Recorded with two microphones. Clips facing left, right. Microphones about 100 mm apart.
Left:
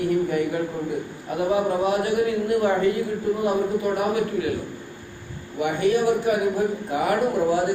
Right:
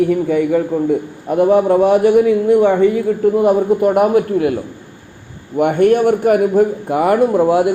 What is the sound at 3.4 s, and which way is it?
A man's voice, 60° right (ahead or behind).